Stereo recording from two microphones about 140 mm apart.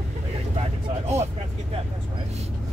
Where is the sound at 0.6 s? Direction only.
50° right (ahead or behind).